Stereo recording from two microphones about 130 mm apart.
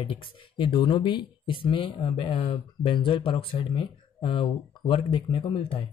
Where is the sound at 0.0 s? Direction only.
45° left (ahead or behind).